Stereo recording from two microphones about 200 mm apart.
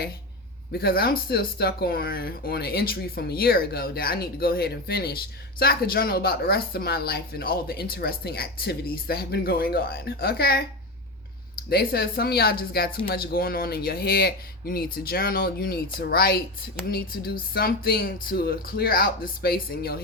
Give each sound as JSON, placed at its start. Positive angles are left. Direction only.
{"t": 0.7, "sound": "speech", "side_deg": 50}
{"t": 11.7, "sound": "speech", "side_deg": 50}